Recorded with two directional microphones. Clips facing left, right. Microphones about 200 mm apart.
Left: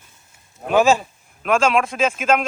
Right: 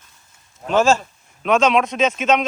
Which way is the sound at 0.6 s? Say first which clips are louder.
Left 1 dB; 15° left (ahead or behind).